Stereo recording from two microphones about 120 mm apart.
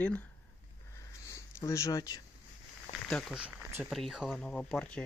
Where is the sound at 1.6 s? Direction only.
25° left (ahead or behind).